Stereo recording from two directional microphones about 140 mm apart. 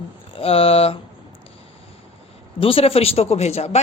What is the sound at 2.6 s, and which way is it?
A woman's voice, 40° left (ahead or behind).